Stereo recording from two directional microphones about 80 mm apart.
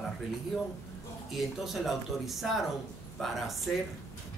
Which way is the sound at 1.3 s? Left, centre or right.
Centre.